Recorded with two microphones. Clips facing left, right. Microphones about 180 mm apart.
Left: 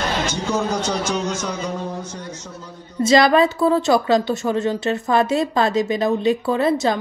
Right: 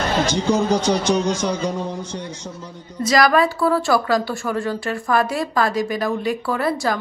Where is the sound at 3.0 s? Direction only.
25° left (ahead or behind).